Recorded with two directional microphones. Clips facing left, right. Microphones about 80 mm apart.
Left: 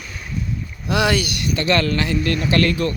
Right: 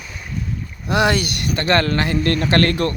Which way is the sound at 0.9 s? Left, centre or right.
Right.